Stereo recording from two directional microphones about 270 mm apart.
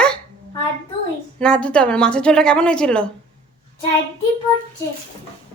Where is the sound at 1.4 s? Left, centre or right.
Centre.